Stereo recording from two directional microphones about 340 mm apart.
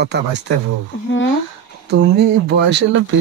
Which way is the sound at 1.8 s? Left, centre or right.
Right.